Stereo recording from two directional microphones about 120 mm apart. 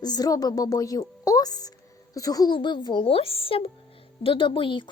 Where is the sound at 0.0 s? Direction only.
35° left (ahead or behind).